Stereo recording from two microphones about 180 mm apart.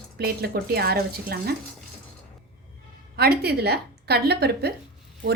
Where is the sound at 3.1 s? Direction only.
60° right (ahead or behind).